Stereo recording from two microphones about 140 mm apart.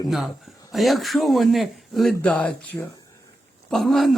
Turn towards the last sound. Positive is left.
turn(degrees=0)  # may be behind; listen again after turning